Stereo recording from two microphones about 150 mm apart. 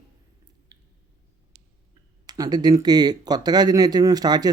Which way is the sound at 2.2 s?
25° right (ahead or behind).